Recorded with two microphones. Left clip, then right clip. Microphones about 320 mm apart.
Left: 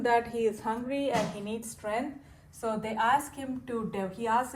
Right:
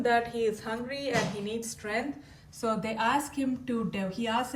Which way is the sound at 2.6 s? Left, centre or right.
Centre.